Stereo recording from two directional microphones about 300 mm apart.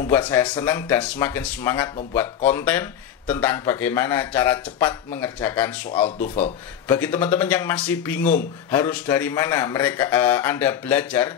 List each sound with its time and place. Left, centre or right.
0.0 s speech: centre
5.9 s speech: left
6.9 s speech: centre